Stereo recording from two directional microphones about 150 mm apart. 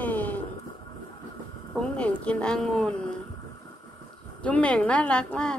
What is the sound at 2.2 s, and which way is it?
Speech, 5° left (ahead or behind).